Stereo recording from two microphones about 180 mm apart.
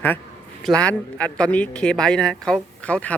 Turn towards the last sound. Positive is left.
turn(degrees=5)  # may be behind; listen again after turning